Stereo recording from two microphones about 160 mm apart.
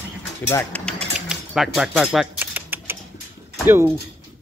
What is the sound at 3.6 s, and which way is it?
Speech, 15° right (ahead or behind).